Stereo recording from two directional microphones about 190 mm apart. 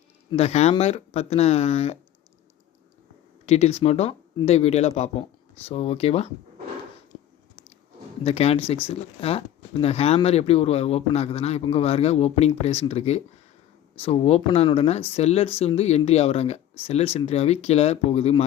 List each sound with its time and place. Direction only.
0.3 s speech: 35° left (ahead or behind)
3.4 s speech: 35° left (ahead or behind)
8.2 s speech: 30° left (ahead or behind)